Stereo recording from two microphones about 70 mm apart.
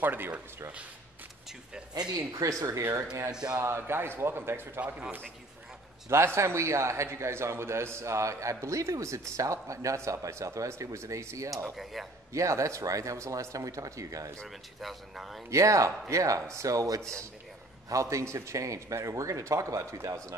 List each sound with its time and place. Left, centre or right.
0.0 s speech: right
2.0 s speech: right
2.8 s a man's voice: right
4.8 s a man's voice: centre
6.0 s a man's voice: right
11.7 s speech: centre
12.3 s a man's voice: right
14.8 s speech: centre
15.5 s a man's voice: right